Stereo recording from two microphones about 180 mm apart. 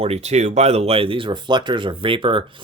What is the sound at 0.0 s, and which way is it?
Speech, 35° right (ahead or behind).